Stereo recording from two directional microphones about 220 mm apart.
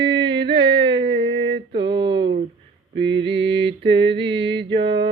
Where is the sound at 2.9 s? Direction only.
55° right (ahead or behind).